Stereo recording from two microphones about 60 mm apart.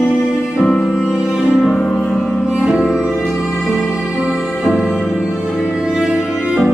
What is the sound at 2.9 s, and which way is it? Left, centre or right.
Music, centre.